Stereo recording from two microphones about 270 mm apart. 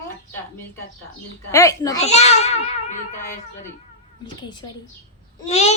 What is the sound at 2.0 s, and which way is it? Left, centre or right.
Child singing, left.